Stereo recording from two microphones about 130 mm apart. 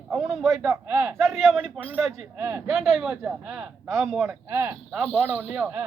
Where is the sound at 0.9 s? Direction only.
15° right (ahead or behind).